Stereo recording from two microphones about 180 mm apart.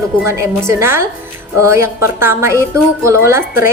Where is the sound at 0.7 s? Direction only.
15° right (ahead or behind).